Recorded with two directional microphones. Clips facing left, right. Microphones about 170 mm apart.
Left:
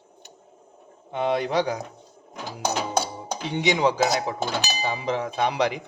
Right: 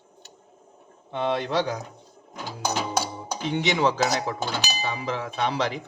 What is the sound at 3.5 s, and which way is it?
Speech, 15° left (ahead or behind).